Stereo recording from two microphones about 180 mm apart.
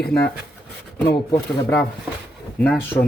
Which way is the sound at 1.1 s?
15° left (ahead or behind).